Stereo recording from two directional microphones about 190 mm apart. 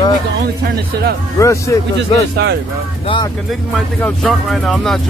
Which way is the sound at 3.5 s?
Centre (ahead or behind).